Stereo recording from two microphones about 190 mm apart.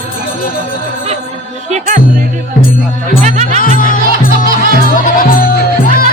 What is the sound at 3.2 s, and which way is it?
Music, 40° right (ahead or behind).